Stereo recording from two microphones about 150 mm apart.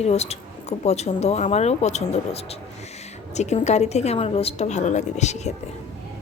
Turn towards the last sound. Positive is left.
turn(degrees=50)  # may be behind; listen again after turning